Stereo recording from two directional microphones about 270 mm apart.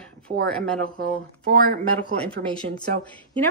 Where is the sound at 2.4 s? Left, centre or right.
Right.